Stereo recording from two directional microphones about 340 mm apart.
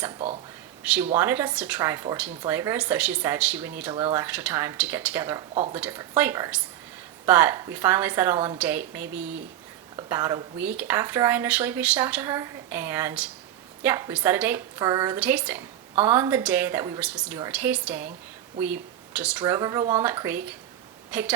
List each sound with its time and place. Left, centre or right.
0.8 s a woman's voice: centre